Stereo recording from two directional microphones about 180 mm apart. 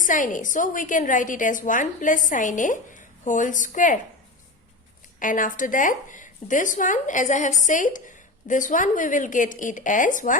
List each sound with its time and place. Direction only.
0.0 s a woman's voice: 45° left (ahead or behind)
5.2 s a woman's voice: 50° left (ahead or behind)